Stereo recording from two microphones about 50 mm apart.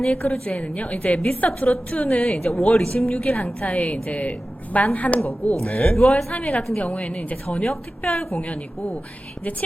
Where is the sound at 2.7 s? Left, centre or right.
Centre.